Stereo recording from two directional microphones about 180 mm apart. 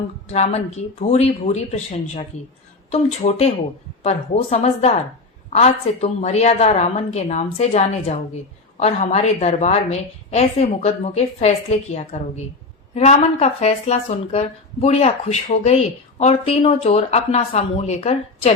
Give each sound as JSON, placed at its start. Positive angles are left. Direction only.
{"t": 0.3, "sound": "speech", "side_deg": 40}